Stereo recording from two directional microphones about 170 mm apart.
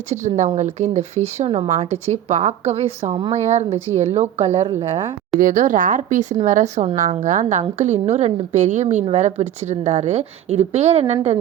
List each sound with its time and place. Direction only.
0.1 s a woman's voice: 45° right (ahead or behind)
5.4 s a woman's voice: 50° right (ahead or behind)